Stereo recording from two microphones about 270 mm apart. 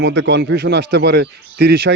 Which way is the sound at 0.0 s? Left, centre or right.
Right.